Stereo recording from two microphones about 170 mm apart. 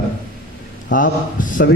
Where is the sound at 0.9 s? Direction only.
50° left (ahead or behind).